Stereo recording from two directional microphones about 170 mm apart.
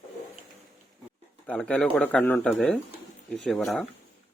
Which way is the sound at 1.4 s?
10° left (ahead or behind).